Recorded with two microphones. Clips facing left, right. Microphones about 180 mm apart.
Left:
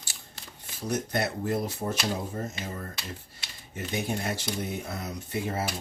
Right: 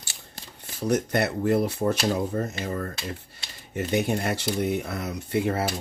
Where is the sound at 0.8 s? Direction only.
65° right (ahead or behind).